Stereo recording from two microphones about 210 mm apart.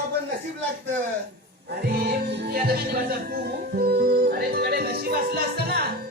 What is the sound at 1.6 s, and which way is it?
Speech, 45° right (ahead or behind).